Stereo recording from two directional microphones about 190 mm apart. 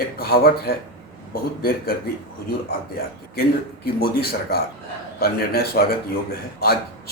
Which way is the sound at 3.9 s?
50° left (ahead or behind).